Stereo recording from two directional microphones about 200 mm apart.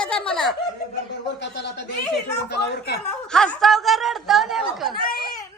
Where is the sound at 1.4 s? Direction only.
60° left (ahead or behind).